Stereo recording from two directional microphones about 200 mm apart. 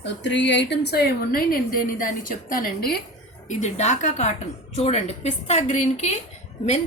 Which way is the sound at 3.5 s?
35° left (ahead or behind).